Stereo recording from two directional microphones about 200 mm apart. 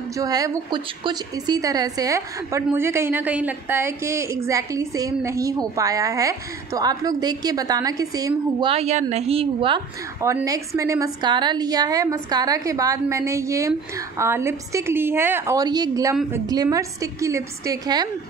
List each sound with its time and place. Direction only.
0.1 s a woman's voice: 15° right (ahead or behind)
10.2 s a woman's voice: 15° right (ahead or behind)